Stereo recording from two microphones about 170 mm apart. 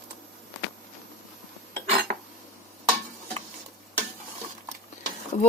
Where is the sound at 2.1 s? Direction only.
65° right (ahead or behind).